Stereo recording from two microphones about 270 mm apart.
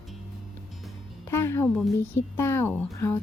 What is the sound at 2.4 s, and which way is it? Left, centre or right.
Speech, centre.